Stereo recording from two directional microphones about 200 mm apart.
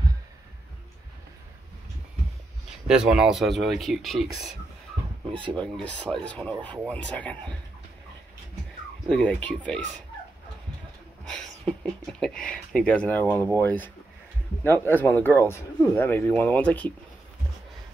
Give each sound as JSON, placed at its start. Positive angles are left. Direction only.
{"t": 2.9, "sound": "speech", "side_deg": -5}
{"t": 5.4, "sound": "speech", "side_deg": -25}
{"t": 5.8, "sound": "speech", "side_deg": 5}
{"t": 9.1, "sound": "speech", "side_deg": 5}
{"t": 11.2, "sound": "speech", "side_deg": 5}